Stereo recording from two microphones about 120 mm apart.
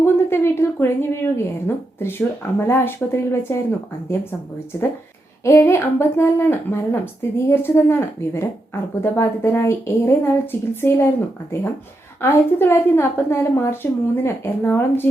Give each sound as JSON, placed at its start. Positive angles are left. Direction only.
{"t": 0.0, "sound": "a woman's voice", "side_deg": 20}
{"t": 12.2, "sound": "speech", "side_deg": 20}